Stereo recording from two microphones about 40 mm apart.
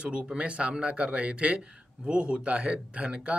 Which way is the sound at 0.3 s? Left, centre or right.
Right.